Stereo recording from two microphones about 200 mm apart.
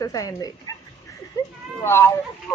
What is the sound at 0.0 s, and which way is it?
Speech, 15° left (ahead or behind).